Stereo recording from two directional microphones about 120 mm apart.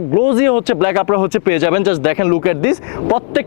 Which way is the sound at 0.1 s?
25° left (ahead or behind).